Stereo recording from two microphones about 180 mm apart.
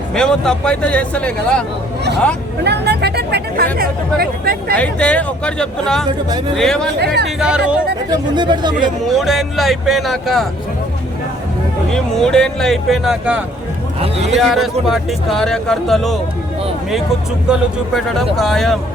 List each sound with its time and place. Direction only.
0.1 s speech: 5° left (ahead or behind)
2.6 s speech: 70° right (ahead or behind)
4.8 s speech: 5° left (ahead or behind)
7.0 s speech: 65° right (ahead or behind)
7.3 s speech: 5° right (ahead or behind)
8.4 s speech: 25° right (ahead or behind)
9.0 s speech: centre (ahead or behind)
11.9 s speech: 5° left (ahead or behind)
14.0 s a man's voice: 35° right (ahead or behind)
14.3 s speech: centre (ahead or behind)
17.5 s speech: centre (ahead or behind)